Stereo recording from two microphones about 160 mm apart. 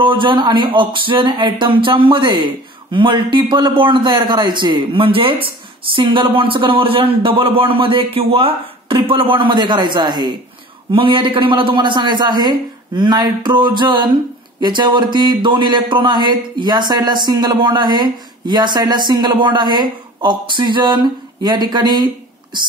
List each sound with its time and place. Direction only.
0.0 s speech: 30° right (ahead or behind)